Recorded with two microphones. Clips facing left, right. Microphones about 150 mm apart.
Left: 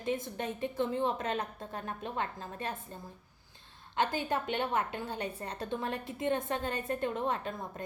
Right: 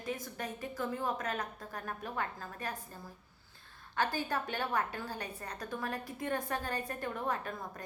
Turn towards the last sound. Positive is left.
turn(degrees=25)  # may be behind; listen again after turning